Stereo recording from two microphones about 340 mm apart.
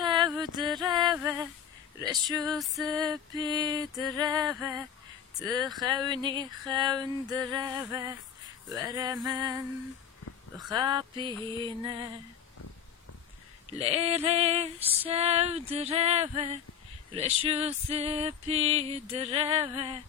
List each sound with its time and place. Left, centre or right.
0.0 s a sound: centre
1.1 s female singing: centre
5.5 s speech: centre
5.8 s female singing: centre
10.6 s female singing: centre
13.7 s female singing: centre